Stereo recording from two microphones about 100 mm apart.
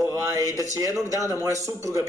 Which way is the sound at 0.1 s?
35° right (ahead or behind).